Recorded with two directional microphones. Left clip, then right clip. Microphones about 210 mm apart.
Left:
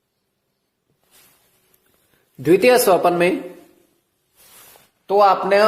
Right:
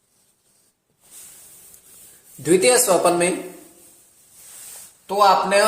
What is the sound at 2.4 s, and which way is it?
Speech, 35° left (ahead or behind).